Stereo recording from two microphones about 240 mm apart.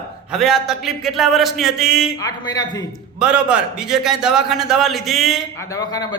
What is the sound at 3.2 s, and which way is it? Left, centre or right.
A man's voice, centre.